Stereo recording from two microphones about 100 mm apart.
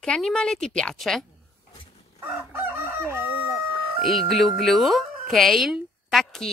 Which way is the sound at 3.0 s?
25° right (ahead or behind).